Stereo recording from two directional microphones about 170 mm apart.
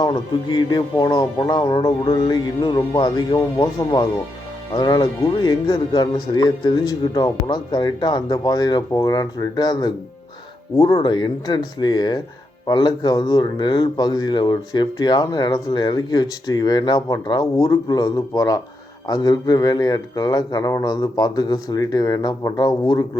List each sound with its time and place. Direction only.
0.0 s speech: 25° left (ahead or behind)